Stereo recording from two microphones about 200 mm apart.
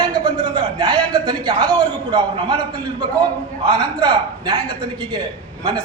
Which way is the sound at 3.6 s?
25° right (ahead or behind).